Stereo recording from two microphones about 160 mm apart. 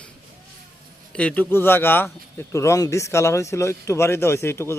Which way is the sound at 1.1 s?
10° left (ahead or behind).